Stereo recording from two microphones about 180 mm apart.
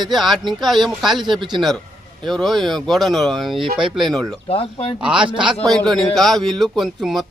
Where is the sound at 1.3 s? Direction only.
25° right (ahead or behind).